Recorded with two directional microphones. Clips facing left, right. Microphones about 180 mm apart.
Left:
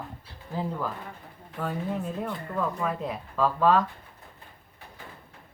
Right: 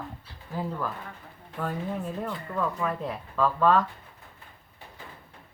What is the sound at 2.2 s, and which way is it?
Speech, 5° left (ahead or behind).